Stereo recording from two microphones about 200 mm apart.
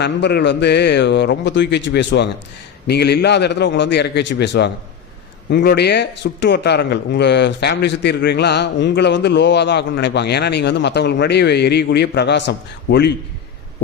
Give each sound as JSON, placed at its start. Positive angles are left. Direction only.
{"t": 0.0, "sound": "a man's voice", "side_deg": 60}